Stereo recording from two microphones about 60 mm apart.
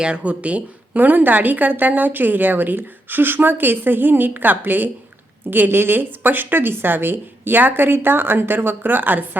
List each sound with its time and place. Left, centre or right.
0.0 s a woman's voice: centre